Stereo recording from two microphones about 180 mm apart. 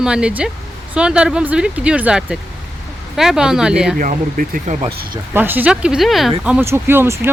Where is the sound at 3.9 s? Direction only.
50° right (ahead or behind).